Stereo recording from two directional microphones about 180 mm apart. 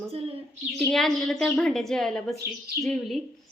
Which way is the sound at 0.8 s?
Centre (ahead or behind).